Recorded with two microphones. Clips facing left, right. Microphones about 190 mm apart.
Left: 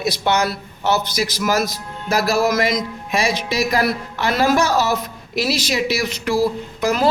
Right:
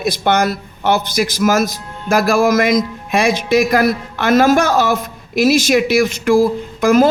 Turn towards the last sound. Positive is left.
turn(degrees=-50)  # may be behind; listen again after turning